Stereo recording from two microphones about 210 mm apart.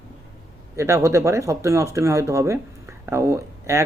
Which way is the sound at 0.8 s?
15° right (ahead or behind).